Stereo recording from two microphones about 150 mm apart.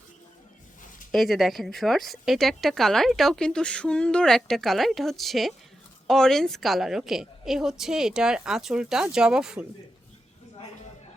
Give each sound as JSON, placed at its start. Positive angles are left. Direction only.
{"t": 1.1, "sound": "speech", "side_deg": 0}